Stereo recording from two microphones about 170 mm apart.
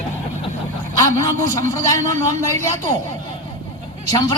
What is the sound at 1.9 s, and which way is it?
Speech, 15° left (ahead or behind).